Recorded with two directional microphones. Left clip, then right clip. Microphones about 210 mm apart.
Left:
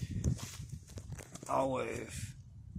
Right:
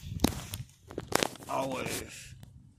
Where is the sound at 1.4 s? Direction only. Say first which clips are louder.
Even; 5° left (ahead or behind).